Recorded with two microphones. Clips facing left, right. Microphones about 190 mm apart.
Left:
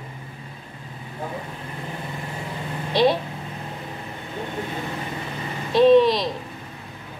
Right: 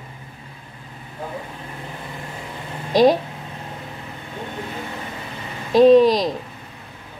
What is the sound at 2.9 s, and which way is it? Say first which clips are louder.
Speech: right 5 dB; 45° right (ahead or behind).